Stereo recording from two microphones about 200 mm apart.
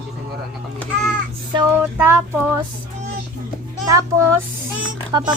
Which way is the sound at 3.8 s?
15° right (ahead or behind).